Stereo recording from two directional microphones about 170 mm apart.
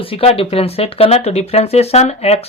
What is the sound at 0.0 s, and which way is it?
Speech, 35° left (ahead or behind).